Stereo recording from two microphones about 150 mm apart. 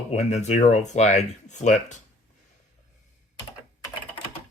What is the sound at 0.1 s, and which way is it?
Speech, 50° left (ahead or behind).